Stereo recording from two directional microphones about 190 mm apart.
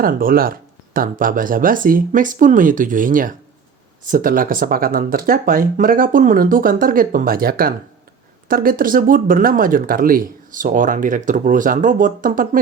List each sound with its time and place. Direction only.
0.0 s speech: 50° right (ahead or behind)